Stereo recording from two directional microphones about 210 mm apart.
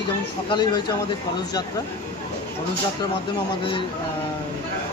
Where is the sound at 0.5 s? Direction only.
20° left (ahead or behind).